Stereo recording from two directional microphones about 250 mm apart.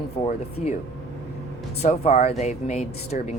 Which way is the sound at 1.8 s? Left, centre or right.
Left.